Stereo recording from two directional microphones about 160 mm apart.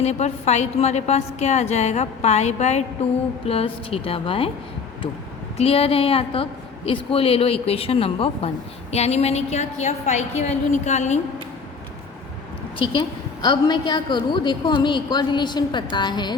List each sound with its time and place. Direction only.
0.0 s a woman's voice: 45° left (ahead or behind)
5.5 s a woman's voice: 35° left (ahead or behind)
12.8 s a woman's voice: 30° left (ahead or behind)